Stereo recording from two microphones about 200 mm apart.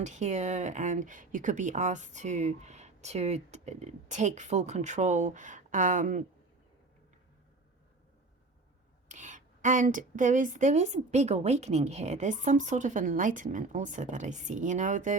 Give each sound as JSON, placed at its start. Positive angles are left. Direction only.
{"t": 0.0, "sound": "speech", "side_deg": -35}
{"t": 9.0, "sound": "speech", "side_deg": -40}